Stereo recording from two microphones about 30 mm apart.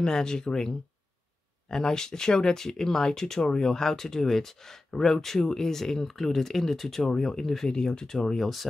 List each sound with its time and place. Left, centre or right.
0.0 s speech: left
7.7 s speech: left